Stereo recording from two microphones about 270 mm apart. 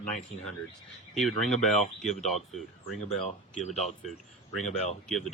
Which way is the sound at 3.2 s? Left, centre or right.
Left.